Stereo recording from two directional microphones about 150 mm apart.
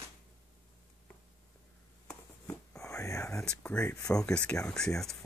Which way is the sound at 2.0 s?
5° left (ahead or behind).